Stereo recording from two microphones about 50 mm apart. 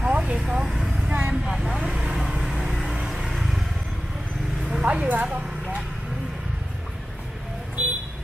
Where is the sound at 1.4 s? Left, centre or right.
Centre.